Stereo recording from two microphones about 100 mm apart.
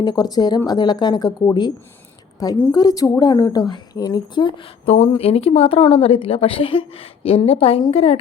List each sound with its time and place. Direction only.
0.0 s a woman's voice: 40° left (ahead or behind); by 8.2 s 75° left (ahead or behind)